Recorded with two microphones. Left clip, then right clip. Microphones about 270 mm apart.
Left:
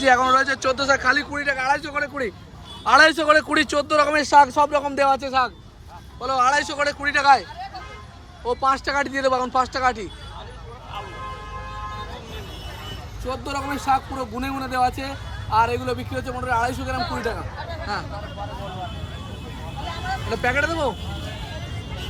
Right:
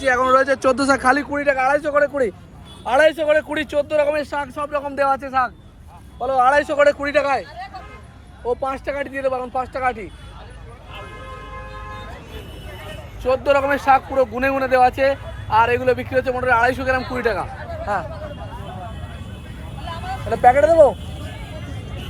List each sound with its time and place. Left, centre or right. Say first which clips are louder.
0.0 s speech: right 1 dB; centre
0.9 s speech: right 2 dB; centre
2.8 s speech: left 1 dB; centre
6.2 s speech: right 4 dB; centre
8.4 s speech: left 2 dB; centre
13.3 s speech: right 11 dB; centre
20.3 s speech: right 10 dB; centre